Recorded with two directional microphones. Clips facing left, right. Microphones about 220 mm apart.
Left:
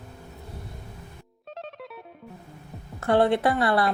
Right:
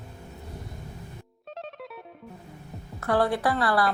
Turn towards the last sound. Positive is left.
turn(degrees=25)  # may be behind; listen again after turning